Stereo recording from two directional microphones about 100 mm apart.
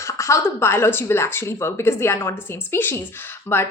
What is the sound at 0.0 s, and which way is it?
Speech, 30° left (ahead or behind).